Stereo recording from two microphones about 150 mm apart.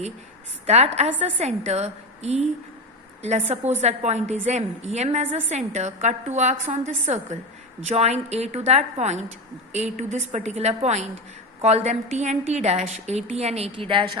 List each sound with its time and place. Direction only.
0.7 s a woman's voice: 45° right (ahead or behind)